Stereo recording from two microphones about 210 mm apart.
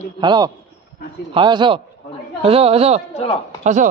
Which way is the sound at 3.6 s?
35° right (ahead or behind).